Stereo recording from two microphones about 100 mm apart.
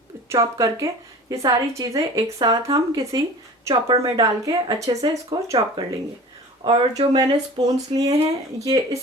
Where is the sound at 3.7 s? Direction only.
60° right (ahead or behind).